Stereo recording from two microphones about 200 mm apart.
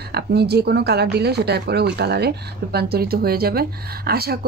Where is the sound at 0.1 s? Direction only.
55° right (ahead or behind).